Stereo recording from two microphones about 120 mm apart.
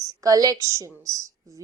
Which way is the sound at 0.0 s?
30° right (ahead or behind).